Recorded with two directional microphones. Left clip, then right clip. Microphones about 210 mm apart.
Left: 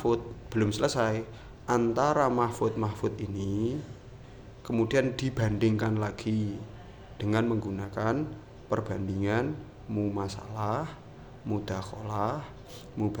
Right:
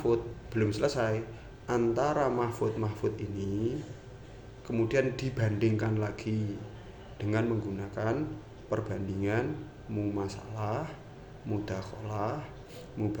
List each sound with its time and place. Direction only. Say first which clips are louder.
0.0 s a man's voice: left 1 dB; 25° left (ahead or behind)